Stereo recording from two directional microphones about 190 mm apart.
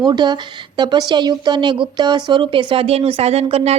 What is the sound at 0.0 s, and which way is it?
A woman's voice, 20° right (ahead or behind).